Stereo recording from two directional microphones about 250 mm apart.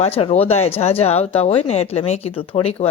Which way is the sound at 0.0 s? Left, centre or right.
Left.